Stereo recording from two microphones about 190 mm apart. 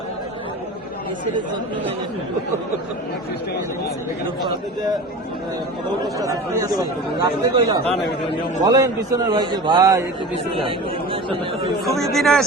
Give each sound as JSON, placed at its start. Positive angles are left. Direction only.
{"t": 6.1, "sound": "speech", "side_deg": -15}
{"t": 11.9, "sound": "speech", "side_deg": 0}